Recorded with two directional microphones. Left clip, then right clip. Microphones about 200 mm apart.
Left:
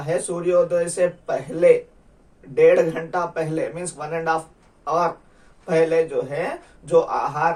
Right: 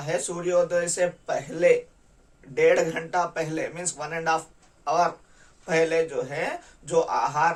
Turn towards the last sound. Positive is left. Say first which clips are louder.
# left 2 dB
turn(degrees=-25)  # may be behind; listen again after turning